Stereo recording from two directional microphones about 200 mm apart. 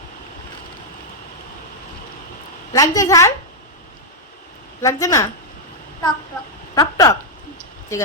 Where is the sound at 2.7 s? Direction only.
15° left (ahead or behind).